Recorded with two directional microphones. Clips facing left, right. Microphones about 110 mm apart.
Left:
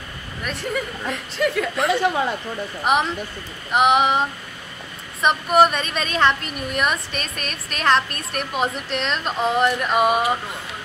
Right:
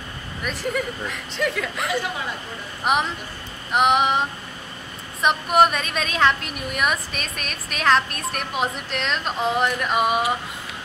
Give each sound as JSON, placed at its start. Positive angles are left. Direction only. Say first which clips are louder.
{"t": 0.4, "sound": "a woman's voice", "louder": "even", "side_deg": 0}